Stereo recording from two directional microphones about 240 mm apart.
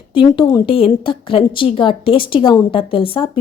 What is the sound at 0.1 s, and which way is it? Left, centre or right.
A woman's voice, left.